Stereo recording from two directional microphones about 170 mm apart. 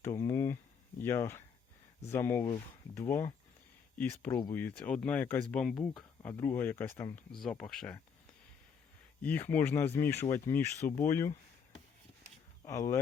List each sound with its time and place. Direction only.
0.0 s a sound: 15° left (ahead or behind)
2.0 s speech: 15° left (ahead or behind)
6.3 s speech: 15° left (ahead or behind)
7.4 s speech: 5° left (ahead or behind)
9.2 s speech: 10° left (ahead or behind)
12.6 s speech: 20° left (ahead or behind)